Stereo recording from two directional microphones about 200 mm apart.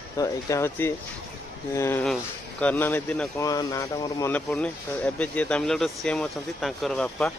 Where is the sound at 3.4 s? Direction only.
15° left (ahead or behind).